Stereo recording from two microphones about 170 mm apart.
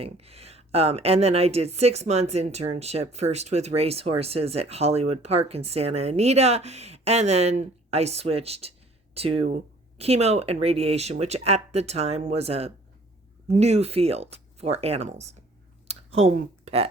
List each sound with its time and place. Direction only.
0.0 s a woman's voice: 35° right (ahead or behind)